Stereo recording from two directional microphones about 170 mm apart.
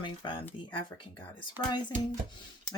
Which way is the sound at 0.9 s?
15° left (ahead or behind).